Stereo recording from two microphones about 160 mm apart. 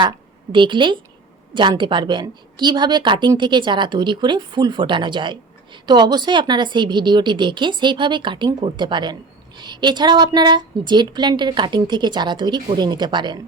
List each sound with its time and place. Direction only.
0.5 s a woman's voice: 30° right (ahead or behind)